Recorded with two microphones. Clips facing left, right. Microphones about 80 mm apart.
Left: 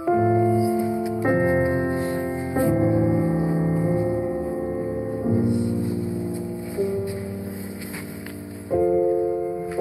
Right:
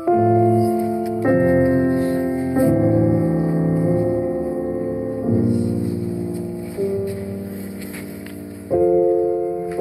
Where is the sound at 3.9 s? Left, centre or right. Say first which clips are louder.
Right 4 dB; left.